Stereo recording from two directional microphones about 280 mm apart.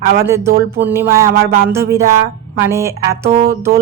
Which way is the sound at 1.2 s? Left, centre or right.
Right.